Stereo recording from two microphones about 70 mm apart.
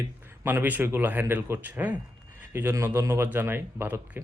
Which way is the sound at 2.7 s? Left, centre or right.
Right.